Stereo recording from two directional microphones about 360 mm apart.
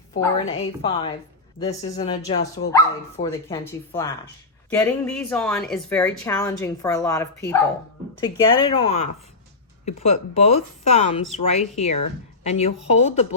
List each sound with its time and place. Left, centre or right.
0.2 s a woman's voice: centre